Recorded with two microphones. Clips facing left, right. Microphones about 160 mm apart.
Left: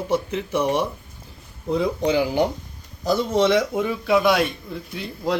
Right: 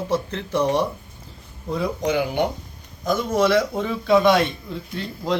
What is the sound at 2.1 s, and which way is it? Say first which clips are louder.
Speech: left 1 dB; 30° left (ahead or behind).